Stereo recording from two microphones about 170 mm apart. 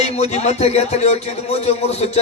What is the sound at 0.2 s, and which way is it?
A man's voice, 40° left (ahead or behind).